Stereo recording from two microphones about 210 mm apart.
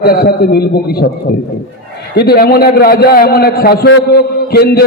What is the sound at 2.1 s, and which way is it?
A man's voice, 50° left (ahead or behind).